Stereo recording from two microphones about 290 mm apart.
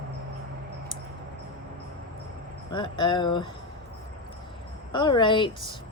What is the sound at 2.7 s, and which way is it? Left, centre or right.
Speech, centre.